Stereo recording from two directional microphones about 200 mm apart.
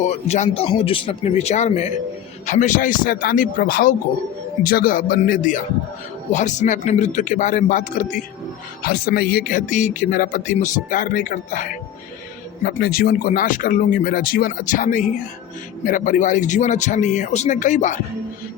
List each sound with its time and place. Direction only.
0.0 s speech: 35° left (ahead or behind)